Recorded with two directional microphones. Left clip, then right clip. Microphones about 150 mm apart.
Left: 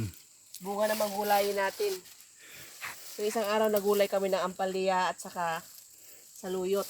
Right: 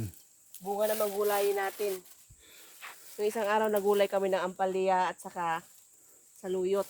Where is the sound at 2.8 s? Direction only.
90° left.